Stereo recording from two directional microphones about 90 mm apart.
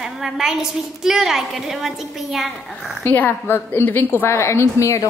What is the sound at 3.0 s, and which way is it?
A woman's voice, 20° left (ahead or behind).